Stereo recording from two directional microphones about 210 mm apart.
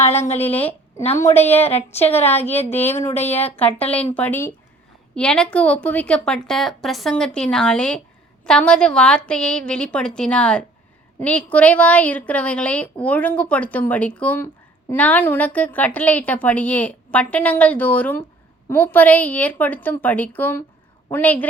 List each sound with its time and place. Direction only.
0.1 s speech: 30° left (ahead or behind)
0.5 s a woman's voice: 10° left (ahead or behind)
1.0 s speech: 30° left (ahead or behind)
1.3 s a woman's voice: 10° left (ahead or behind)
2.0 s a woman's voice: 30° left (ahead or behind)
2.3 s a woman's voice: 10° left (ahead or behind)
2.7 s speech: 30° left (ahead or behind)
3.4 s a woman's voice: 10° left (ahead or behind)